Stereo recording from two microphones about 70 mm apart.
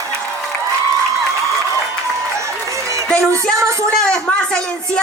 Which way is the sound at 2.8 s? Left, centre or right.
Right.